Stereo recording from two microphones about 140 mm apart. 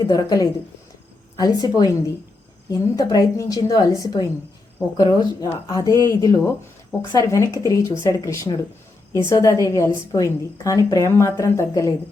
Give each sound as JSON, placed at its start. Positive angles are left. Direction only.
{"t": 0.0, "sound": "a woman's voice", "side_deg": 25}
{"t": 5.9, "sound": "speech", "side_deg": -30}
{"t": 6.1, "sound": "a woman's voice", "side_deg": 25}